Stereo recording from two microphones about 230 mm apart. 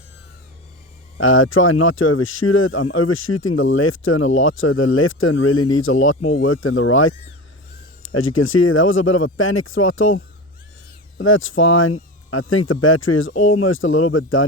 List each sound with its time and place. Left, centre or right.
1.2 s speech: left
11.2 s speech: left